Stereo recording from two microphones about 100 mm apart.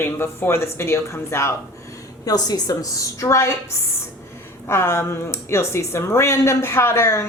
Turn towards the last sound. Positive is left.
turn(degrees=30)  # may be behind; listen again after turning